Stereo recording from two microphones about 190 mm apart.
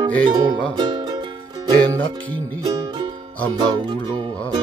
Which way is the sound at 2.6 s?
20° right (ahead or behind).